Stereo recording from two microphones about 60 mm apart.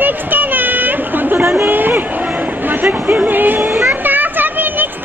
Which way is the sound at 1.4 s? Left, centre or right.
Right.